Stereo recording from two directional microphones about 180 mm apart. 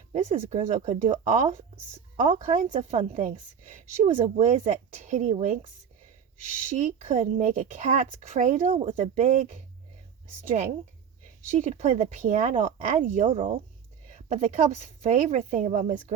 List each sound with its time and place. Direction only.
0.1 s speech: 40° right (ahead or behind)
6.7 s speech: 45° right (ahead or behind)
11.5 s speech: 45° right (ahead or behind)